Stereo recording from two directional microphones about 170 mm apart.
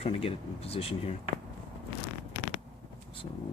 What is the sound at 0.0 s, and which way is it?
Speech, 35° left (ahead or behind).